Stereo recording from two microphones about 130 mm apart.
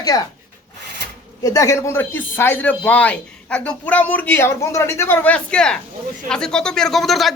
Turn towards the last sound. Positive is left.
turn(degrees=0)  # may be behind; listen again after turning